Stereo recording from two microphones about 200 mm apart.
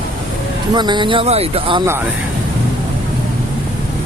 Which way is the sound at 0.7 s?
20° right (ahead or behind).